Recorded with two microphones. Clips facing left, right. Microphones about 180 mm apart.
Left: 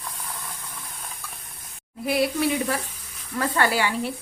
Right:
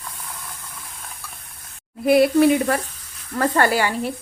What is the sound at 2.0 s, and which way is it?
A woman's voice, 55° right (ahead or behind).